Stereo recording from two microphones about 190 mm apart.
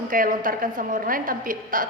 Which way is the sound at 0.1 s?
45° right (ahead or behind).